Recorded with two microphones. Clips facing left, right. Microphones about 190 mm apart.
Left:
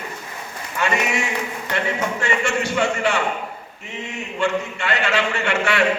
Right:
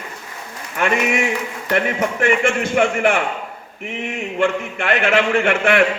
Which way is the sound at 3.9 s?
90° right.